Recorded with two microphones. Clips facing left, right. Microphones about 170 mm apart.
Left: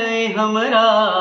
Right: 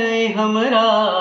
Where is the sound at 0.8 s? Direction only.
30° right (ahead or behind).